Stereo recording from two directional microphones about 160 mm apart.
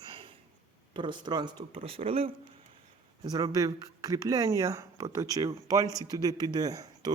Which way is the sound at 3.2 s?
25° right (ahead or behind).